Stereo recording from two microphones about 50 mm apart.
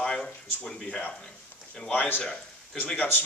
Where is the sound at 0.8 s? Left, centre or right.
Left.